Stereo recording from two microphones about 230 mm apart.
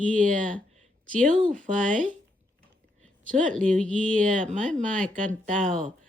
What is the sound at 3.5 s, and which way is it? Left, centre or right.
Speech, centre.